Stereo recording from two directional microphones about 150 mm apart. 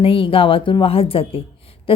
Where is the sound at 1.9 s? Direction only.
35° left (ahead or behind).